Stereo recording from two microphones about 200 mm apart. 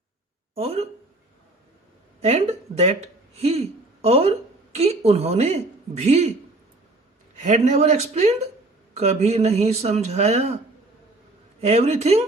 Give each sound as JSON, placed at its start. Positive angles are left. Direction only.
{"t": 0.5, "sound": "speech", "side_deg": -30}
{"t": 2.2, "sound": "a woman's voice", "side_deg": -30}
{"t": 7.3, "sound": "speech", "side_deg": -35}
{"t": 11.6, "sound": "speech", "side_deg": -30}